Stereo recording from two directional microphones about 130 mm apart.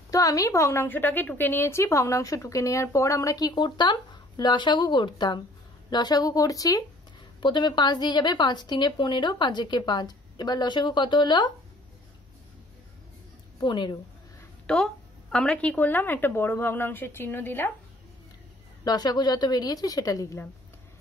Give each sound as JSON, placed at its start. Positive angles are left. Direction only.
{"t": 0.1, "sound": "a woman's voice", "side_deg": 25}
{"t": 13.6, "sound": "a woman's voice", "side_deg": 35}
{"t": 14.7, "sound": "a woman's voice", "side_deg": 5}
{"t": 18.9, "sound": "a woman's voice", "side_deg": 30}